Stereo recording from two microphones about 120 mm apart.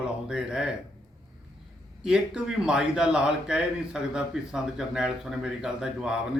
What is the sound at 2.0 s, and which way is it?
A man's voice, 5° right (ahead or behind).